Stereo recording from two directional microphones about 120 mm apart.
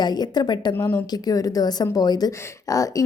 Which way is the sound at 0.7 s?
15° left (ahead or behind).